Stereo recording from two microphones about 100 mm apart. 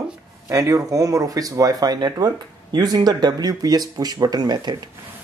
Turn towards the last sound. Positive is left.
turn(degrees=-45)  # may be behind; listen again after turning